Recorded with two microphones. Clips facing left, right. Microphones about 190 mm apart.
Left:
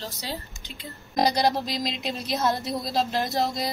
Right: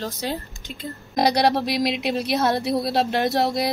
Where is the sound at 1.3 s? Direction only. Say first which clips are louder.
Right 6 dB; 70° right (ahead or behind).